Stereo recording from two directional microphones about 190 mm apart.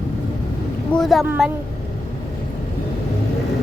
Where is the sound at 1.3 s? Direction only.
5° right (ahead or behind).